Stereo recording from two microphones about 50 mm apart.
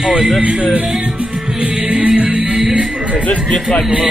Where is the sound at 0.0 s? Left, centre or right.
Centre.